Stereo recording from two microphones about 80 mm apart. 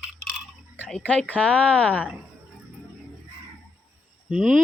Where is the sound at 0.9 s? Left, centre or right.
Centre.